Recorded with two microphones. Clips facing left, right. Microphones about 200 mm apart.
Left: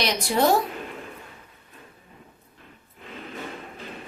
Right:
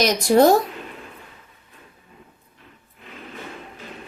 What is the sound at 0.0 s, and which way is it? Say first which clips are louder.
Speech: right 7 dB; 45° right (ahead or behind).